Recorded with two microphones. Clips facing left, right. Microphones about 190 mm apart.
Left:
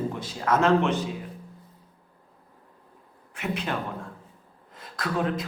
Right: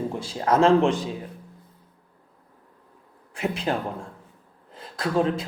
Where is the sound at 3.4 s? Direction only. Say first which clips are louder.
Right 4 dB; 30° right (ahead or behind).